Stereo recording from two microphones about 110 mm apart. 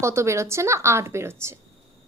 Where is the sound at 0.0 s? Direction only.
25° right (ahead or behind).